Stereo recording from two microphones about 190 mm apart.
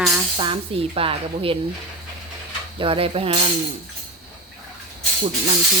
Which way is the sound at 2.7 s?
30° right (ahead or behind).